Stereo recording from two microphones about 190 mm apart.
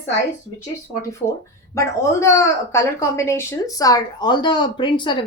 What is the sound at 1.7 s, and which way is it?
A woman's voice, 15° left (ahead or behind).